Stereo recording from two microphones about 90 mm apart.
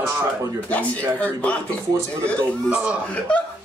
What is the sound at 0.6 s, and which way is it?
Speech, 15° left (ahead or behind).